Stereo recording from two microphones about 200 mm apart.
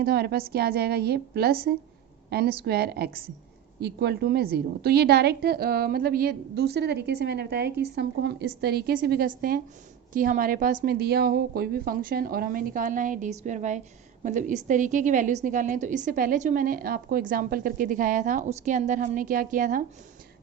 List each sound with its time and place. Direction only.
0.0 s a woman's voice: 50° right (ahead or behind)